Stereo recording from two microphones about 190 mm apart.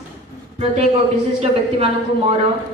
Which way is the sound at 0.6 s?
30° right (ahead or behind).